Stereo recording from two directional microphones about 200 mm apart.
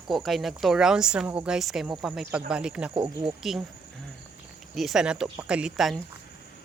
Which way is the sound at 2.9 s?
25° right (ahead or behind).